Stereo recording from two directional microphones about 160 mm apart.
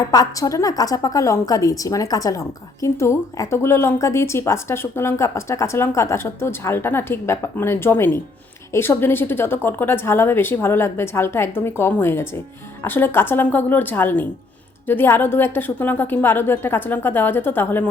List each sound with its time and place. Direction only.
0.1 s a woman's voice: 20° left (ahead or behind)